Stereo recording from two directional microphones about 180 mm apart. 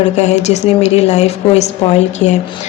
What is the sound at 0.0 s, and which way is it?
A woman's voice, 40° left (ahead or behind).